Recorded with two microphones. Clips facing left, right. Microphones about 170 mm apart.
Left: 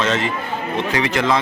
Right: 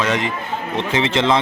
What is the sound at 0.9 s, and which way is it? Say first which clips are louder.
Speech: right 2 dB; 25° right (ahead or behind).